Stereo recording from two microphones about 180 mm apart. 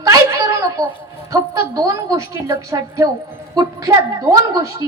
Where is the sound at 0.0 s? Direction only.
20° right (ahead or behind).